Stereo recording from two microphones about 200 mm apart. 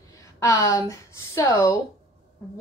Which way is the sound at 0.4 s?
15° left (ahead or behind).